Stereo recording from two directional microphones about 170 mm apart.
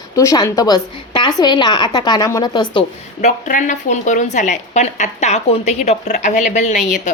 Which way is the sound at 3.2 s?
45° left (ahead or behind).